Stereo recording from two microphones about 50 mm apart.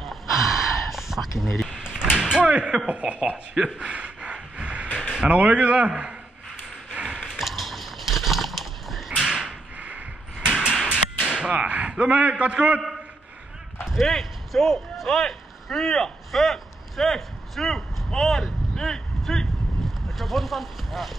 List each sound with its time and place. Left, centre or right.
0.0 s gasp: centre
1.4 s speech: centre
2.1 s slam: centre
2.5 s speech: right
2.9 s a sound: right
5.2 s speech: right
6.9 s a sound: right
7.3 s a sound: centre
9.8 s mechanisms: right
10.5 s sliding door: centre
11.2 s speech: right
13.8 s speech: centre